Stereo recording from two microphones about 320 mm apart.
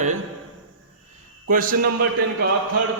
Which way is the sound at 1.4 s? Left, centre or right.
Right.